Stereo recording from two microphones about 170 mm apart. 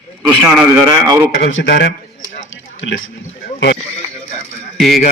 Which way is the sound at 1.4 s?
75° left (ahead or behind).